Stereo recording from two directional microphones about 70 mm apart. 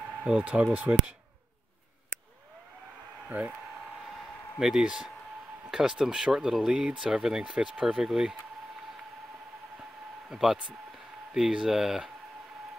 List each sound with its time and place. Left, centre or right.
0.2 s speech: centre
3.3 s speech: centre
4.6 s speech: centre
10.3 s speech: centre